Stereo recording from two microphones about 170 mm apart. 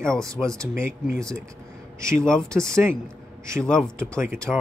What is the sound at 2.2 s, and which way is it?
Speech, 5° left (ahead or behind).